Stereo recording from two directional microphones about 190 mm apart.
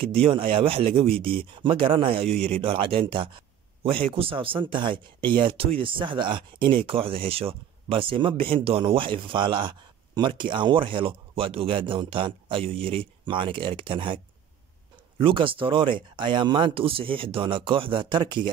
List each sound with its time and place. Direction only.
0.1 s speech: 30° right (ahead or behind)